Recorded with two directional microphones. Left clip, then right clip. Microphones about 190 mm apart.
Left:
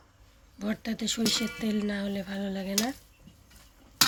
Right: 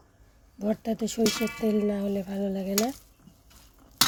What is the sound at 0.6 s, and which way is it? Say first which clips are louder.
A woman's voice: right 5 dB; 35° right (ahead or behind).